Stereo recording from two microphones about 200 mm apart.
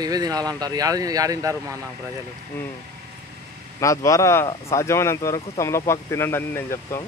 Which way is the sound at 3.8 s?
15° left (ahead or behind).